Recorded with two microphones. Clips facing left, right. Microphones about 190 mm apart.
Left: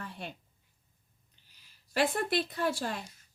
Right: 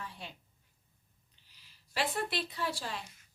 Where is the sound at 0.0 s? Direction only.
55° left (ahead or behind).